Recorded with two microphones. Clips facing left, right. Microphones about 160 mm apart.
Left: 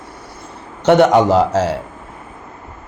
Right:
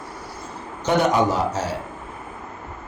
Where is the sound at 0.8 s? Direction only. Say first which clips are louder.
Left 8 dB; 75° left (ahead or behind); by 1.8 s 90° left.